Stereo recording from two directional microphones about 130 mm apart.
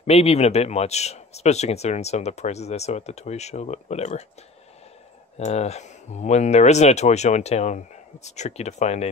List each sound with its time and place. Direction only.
0.0 s speech: 50° left (ahead or behind)
5.4 s speech: 55° left (ahead or behind)